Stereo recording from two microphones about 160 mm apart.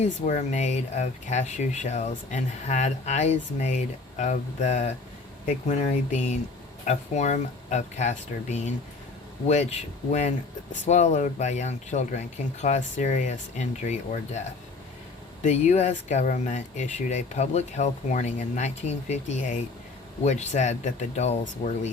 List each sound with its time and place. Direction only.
0.0 s speech: 50° left (ahead or behind)
6.1 s speech: 45° left (ahead or behind)
15.4 s speech: 45° left (ahead or behind)